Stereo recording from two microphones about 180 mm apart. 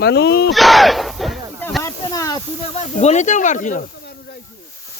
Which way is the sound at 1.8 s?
20° left (ahead or behind).